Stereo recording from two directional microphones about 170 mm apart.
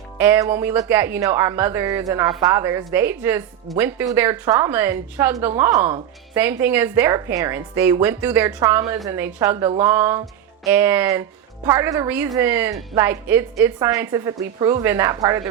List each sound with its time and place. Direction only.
0.2 s a woman's voice: 15° right (ahead or behind)